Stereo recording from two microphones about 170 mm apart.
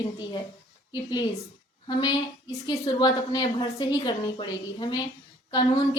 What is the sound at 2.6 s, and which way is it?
A woman's voice, 25° left (ahead or behind).